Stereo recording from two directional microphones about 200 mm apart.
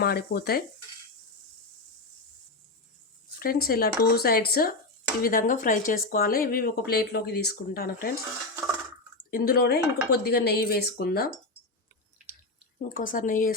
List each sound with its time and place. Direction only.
0.0 s speech: 50° left (ahead or behind)
3.3 s speech: 45° left (ahead or behind)
9.3 s speech: 50° left (ahead or behind)
12.9 s speech: 45° left (ahead or behind)